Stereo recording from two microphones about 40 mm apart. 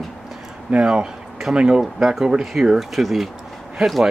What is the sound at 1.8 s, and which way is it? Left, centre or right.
Speech, centre.